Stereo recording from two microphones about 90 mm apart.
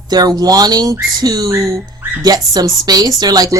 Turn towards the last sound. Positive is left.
turn(degrees=-45)  # may be behind; listen again after turning